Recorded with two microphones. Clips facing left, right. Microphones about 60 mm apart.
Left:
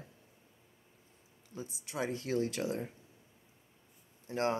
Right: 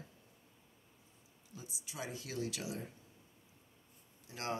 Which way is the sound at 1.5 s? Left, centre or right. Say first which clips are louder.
Left 8 dB; left.